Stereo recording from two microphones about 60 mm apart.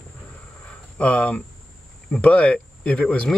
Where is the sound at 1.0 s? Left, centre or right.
Left.